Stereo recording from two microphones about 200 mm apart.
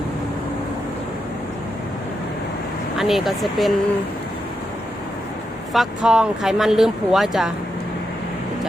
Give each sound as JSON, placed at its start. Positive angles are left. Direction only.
{"t": 3.0, "sound": "speech", "side_deg": 0}
{"t": 5.7, "sound": "speech", "side_deg": 0}